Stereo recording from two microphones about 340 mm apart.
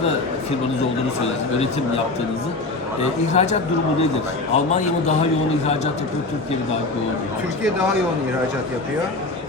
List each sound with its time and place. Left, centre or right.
3.3 s a man's voice: centre